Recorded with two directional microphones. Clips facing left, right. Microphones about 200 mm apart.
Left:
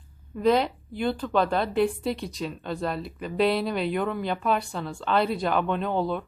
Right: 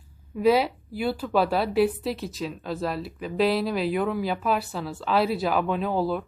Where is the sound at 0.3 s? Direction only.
5° right (ahead or behind).